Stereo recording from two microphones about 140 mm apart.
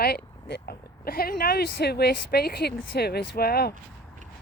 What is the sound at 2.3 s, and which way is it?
Speech, 90° left.